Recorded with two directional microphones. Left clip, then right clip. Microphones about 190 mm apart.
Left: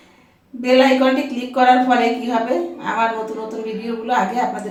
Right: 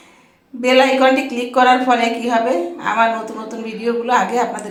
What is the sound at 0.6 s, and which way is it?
A woman's voice, 15° right (ahead or behind).